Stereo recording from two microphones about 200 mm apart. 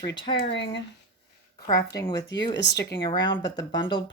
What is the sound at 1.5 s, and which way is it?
Speech, 20° left (ahead or behind).